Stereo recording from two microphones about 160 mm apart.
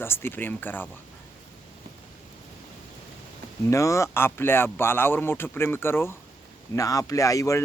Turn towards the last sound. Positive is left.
turn(degrees=20)  # may be behind; listen again after turning